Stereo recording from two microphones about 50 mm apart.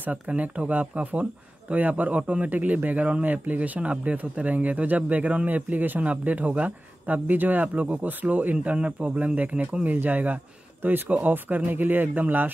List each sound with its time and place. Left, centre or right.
0.3 s a man's voice: right